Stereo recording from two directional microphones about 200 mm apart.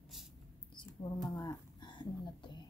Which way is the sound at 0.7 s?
20° left (ahead or behind).